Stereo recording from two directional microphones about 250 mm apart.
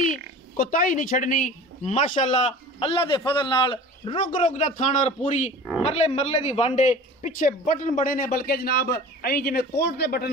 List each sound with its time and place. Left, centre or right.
0.0 s a man's voice: left